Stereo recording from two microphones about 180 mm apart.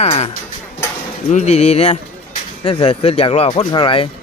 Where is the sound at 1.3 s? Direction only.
40° left (ahead or behind).